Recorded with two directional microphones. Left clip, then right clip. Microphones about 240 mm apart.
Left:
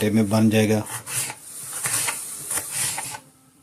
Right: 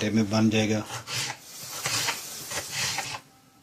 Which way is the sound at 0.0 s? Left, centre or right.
Left.